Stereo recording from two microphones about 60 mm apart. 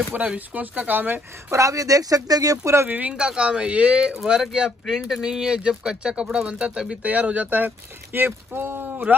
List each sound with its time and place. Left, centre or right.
0.3 s speech: right
1.5 s speech: right
2.9 s speech: right
3.2 s speech: centre
4.2 s speech: centre; by 9.0 s right